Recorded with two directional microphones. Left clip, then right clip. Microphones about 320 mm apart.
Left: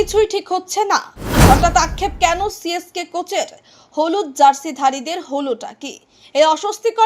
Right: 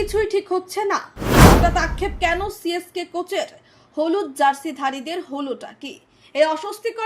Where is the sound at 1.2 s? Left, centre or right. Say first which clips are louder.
Right 6 dB; centre.